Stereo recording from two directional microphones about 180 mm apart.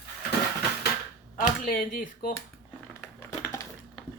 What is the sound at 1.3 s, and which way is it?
Speech, 50° left (ahead or behind).